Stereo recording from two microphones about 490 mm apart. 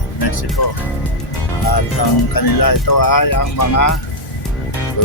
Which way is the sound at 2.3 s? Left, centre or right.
Left.